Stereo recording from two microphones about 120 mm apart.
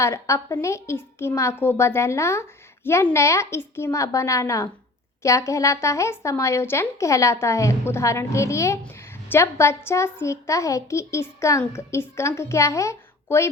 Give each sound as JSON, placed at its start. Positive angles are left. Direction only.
{"t": 0.0, "sound": "a woman's voice", "side_deg": 25}